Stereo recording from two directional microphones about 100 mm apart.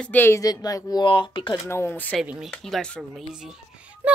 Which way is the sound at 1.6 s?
25° left (ahead or behind).